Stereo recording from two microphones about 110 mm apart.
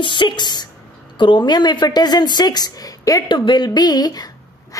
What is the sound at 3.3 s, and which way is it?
Speech, 45° left (ahead or behind).